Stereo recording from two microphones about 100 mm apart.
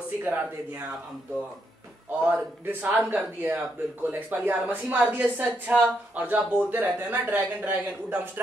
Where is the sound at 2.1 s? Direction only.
20° right (ahead or behind).